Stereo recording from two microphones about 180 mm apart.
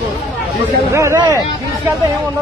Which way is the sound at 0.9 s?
15° right (ahead or behind).